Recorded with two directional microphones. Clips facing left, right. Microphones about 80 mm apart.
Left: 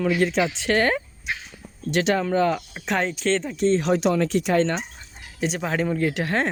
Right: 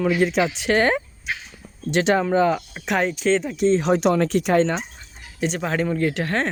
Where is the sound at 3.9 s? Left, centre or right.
Right.